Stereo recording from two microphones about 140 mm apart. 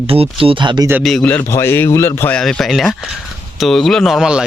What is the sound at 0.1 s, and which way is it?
Speech, 40° right (ahead or behind).